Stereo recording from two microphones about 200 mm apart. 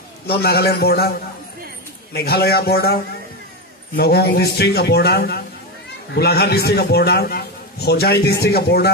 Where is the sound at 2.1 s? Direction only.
55° left (ahead or behind).